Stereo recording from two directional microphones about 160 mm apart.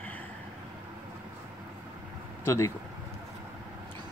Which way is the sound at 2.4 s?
15° left (ahead or behind).